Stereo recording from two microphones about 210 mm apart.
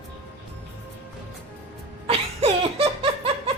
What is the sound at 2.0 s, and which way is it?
Laughter, 25° right (ahead or behind).